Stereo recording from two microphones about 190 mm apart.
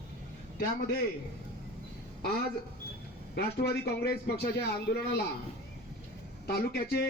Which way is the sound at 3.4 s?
60° left (ahead or behind).